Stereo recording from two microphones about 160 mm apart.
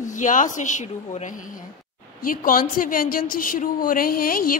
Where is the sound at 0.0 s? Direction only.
50° left (ahead or behind).